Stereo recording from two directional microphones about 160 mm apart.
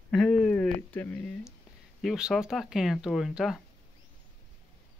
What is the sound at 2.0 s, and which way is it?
Speech, 5° right (ahead or behind).